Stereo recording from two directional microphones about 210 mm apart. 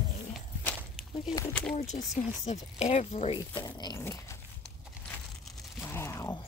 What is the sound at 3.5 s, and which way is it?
Speech, 20° left (ahead or behind).